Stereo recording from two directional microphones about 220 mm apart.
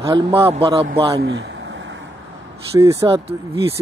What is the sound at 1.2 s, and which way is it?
Vehicle, 55° right (ahead or behind).